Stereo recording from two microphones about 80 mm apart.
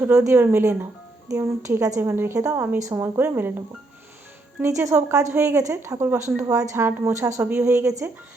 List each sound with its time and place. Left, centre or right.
0.0 s a woman's voice: right
1.3 s a woman's voice: right
2.0 s a woman's voice: right
3.0 s a woman's voice: right
4.6 s a woman's voice: right